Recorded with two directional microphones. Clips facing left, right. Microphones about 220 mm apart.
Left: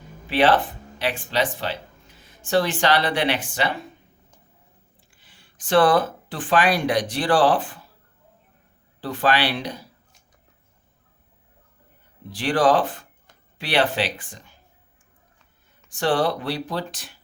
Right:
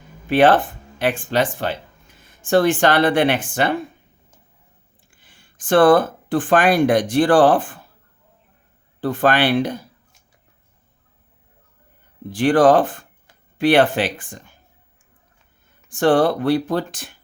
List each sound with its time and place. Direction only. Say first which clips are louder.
0.3 s speech: right 5 dB; 50° right (ahead or behind)
5.1 s speech: right 4 dB; 50° right (ahead or behind)
9.0 s speech: right 5 dB; 50° right (ahead or behind)
12.3 s speech: right 6 dB; 50° right (ahead or behind)
15.9 s speech: right 6 dB; 50° right (ahead or behind)